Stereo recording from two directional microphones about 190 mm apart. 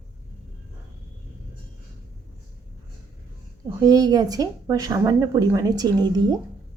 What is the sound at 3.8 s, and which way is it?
Speech, 20° right (ahead or behind).